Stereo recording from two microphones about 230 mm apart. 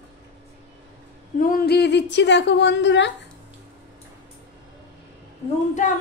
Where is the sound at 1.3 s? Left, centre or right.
Left.